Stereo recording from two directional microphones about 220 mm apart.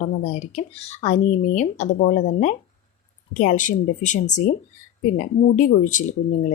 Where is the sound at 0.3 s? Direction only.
30° left (ahead or behind).